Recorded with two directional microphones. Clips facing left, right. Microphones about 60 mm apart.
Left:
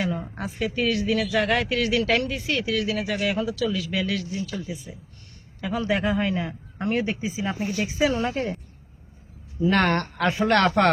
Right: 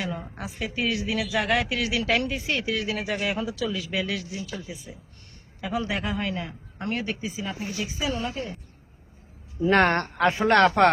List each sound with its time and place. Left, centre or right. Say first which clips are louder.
0.0 s speech: left 4 dB; centre
2.2 s speech: left 1 dB; right
5.5 s speech: left 3 dB; centre
7.6 s speech: left 8 dB; left
9.6 s speech: right 1 dB; right
10.8 s speech: left 1 dB; centre